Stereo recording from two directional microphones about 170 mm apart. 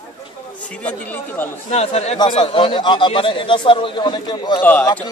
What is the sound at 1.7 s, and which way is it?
Speech, 40° left (ahead or behind).